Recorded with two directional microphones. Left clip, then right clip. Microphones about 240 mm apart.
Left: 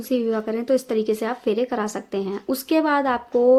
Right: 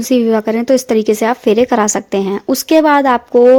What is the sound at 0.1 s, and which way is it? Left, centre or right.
A woman's voice, right.